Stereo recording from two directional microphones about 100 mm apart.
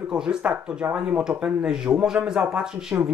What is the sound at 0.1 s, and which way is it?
Speech, 10° right (ahead or behind).